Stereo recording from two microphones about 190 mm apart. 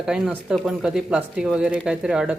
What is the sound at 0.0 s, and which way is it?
Speech, 5° right (ahead or behind).